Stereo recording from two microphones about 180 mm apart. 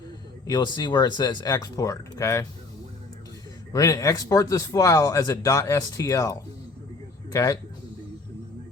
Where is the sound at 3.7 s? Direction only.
20° left (ahead or behind).